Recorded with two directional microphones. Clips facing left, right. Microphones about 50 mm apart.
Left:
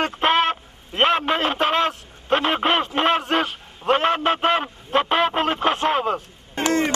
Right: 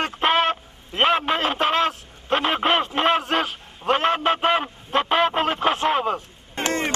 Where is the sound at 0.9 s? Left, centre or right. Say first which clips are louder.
Left 1 dB; centre.